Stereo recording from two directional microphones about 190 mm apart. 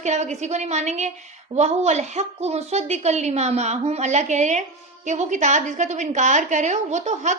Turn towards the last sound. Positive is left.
turn(degrees=-40)  # may be behind; listen again after turning